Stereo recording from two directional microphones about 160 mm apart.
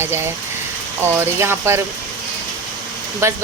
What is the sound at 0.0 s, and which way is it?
Speech, 15° right (ahead or behind).